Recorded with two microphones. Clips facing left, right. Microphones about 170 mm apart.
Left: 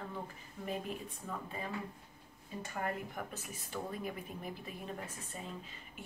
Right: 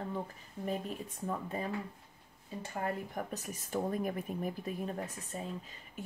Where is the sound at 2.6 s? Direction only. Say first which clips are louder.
Right 2 dB; 30° right (ahead or behind); by 4.7 s 45° right (ahead or behind).